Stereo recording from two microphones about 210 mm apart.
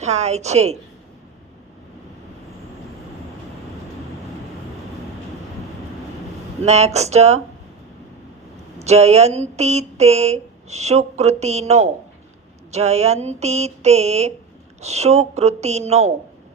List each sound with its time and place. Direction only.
0.0 s speech: 30° right (ahead or behind)
6.7 s speech: 30° right (ahead or behind)
8.8 s speech: 30° right (ahead or behind)